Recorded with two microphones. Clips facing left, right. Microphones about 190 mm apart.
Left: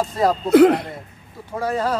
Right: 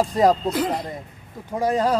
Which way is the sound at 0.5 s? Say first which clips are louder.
Left 11 dB; 65° left (ahead or behind).